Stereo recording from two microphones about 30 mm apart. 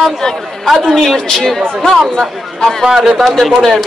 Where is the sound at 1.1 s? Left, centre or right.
Centre.